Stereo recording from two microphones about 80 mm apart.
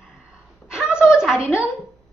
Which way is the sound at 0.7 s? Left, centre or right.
Centre.